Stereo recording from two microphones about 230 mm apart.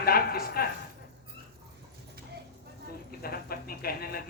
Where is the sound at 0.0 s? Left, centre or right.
Left.